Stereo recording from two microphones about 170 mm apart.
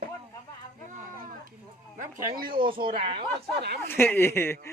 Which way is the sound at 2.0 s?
55° right (ahead or behind).